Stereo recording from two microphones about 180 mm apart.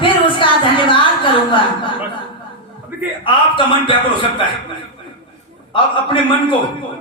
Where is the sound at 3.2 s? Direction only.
30° left (ahead or behind).